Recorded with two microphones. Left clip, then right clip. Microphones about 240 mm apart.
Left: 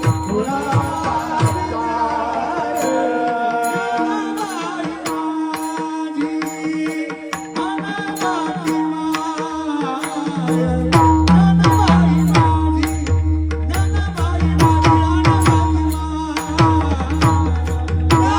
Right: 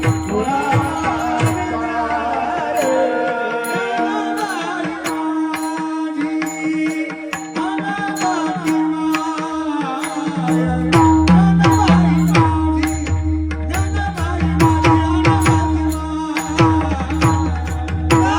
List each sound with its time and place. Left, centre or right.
2.6 s music: left
6.7 s music: left
8.2 s music: left
10.4 s music: left
14.4 s music: left